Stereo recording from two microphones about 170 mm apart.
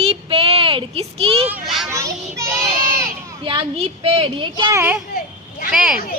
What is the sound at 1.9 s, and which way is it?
Speech, 15° right (ahead or behind).